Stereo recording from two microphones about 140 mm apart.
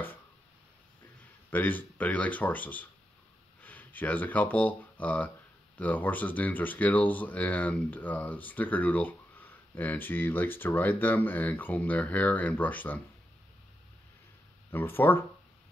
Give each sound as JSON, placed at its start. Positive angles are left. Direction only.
{"t": 1.5, "sound": "speech", "side_deg": 15}
{"t": 14.7, "sound": "speech", "side_deg": 15}